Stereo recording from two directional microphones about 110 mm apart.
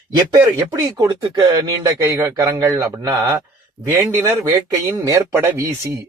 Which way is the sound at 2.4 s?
30° right (ahead or behind).